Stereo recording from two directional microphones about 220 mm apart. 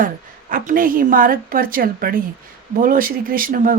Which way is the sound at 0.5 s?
40° right (ahead or behind).